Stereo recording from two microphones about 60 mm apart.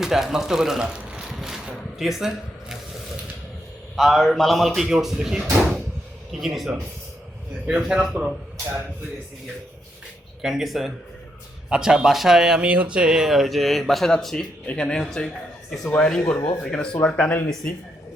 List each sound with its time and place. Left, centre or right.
0.0 s speech: centre
1.6 s a sound: centre
3.9 s speech: centre
10.4 s speech: centre
12.6 s speech: right; by 16.9 s centre
17.2 s speech: left